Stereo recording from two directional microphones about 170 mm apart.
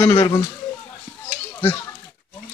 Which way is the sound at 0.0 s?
15° left (ahead or behind).